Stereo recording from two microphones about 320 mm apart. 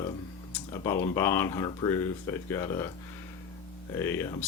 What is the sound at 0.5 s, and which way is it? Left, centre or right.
Speech, centre.